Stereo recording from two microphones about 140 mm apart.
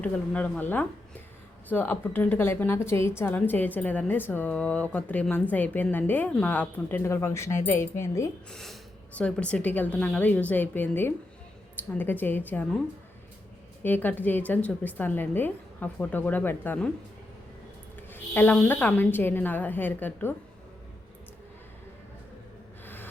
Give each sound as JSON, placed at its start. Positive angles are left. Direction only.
{"t": 0.0, "sound": "a woman's voice", "side_deg": 10}
{"t": 8.4, "sound": "a woman's voice", "side_deg": 0}
{"t": 13.8, "sound": "a woman's voice", "side_deg": 15}
{"t": 18.1, "sound": "a woman's voice", "side_deg": 15}